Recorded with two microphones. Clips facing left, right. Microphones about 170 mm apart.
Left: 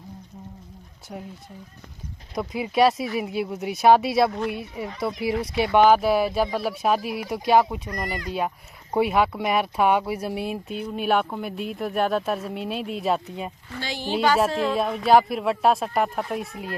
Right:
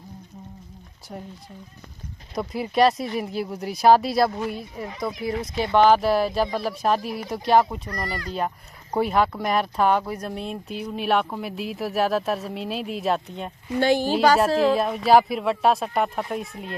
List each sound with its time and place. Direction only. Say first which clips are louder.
1.1 s speech: even; centre (ahead or behind)
2.3 s speech: even; centre (ahead or behind)
8.0 s speech: right 1 dB; 20° left (ahead or behind)
8.3 s speech: even; 5° left (ahead or behind)
13.7 s speech: right 13 dB; 55° right (ahead or behind)
14.6 s speech: right 3 dB; centre (ahead or behind)